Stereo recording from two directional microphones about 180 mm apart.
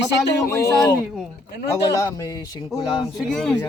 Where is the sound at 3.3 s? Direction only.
5° left (ahead or behind).